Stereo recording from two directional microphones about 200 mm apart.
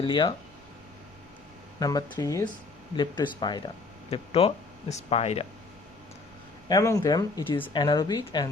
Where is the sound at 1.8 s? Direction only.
20° left (ahead or behind).